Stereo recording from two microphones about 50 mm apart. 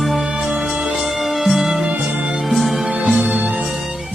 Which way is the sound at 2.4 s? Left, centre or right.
Centre.